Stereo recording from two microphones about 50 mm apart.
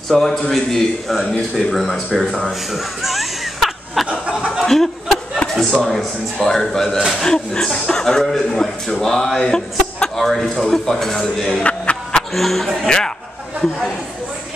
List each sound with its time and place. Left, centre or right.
0.1 s a man's voice: centre
2.7 s music: centre
4.6 s chuckle: centre
6.3 s speech: centre
11.6 s a sound: left
12.2 s speech: centre